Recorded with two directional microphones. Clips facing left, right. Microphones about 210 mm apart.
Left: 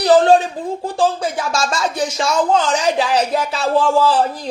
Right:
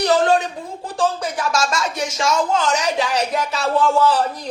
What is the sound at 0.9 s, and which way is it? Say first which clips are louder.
Speech: left 2 dB; 30° left (ahead or behind).